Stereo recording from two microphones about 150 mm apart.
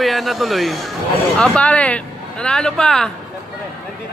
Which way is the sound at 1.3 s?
10° left (ahead or behind).